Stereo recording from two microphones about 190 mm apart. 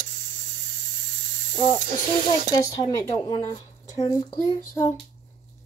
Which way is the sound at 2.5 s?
15° left (ahead or behind).